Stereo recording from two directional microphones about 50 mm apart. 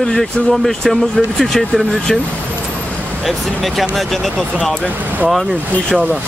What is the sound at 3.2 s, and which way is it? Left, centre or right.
Speech, centre.